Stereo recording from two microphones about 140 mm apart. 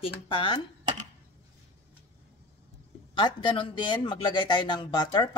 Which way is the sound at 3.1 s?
35° left (ahead or behind).